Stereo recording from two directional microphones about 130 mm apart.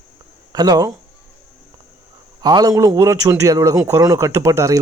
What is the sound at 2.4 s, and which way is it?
A man's voice, 30° right (ahead or behind).